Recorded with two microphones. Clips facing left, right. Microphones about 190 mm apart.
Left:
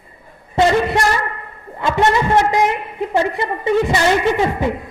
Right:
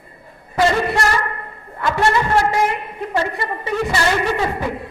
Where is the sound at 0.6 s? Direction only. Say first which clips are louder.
Left 2 dB; 25° left (ahead or behind).